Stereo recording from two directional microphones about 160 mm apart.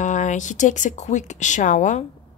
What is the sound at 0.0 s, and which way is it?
A woman's voice, 50° left (ahead or behind).